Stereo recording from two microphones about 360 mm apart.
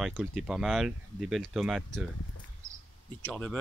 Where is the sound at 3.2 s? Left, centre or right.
Centre.